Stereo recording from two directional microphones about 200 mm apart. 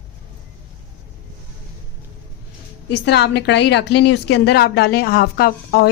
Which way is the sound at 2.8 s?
55° left (ahead or behind).